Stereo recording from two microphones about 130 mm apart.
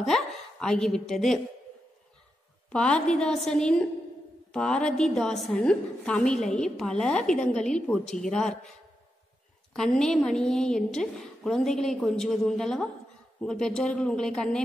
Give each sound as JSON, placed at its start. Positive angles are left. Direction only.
{"t": 0.0, "sound": "a woman's voice", "side_deg": 0}
{"t": 2.7, "sound": "a woman's voice", "side_deg": 5}
{"t": 9.8, "sound": "a woman's voice", "side_deg": 5}